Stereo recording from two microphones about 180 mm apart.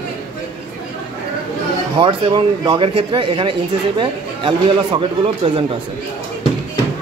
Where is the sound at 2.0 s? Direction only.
25° right (ahead or behind).